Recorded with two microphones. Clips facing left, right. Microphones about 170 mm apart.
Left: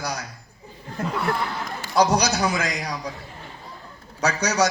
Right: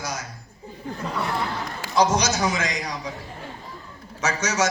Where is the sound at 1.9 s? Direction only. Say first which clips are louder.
Left 1 dB; 35° left (ahead or behind).